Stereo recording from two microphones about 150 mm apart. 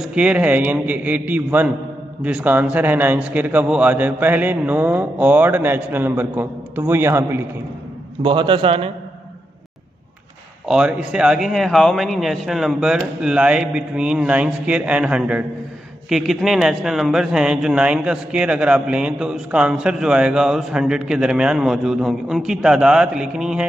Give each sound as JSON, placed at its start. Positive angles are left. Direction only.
{"t": 0.0, "sound": "a man's voice", "side_deg": -10}
{"t": 8.2, "sound": "a man's voice", "side_deg": -35}
{"t": 10.7, "sound": "speech", "side_deg": -5}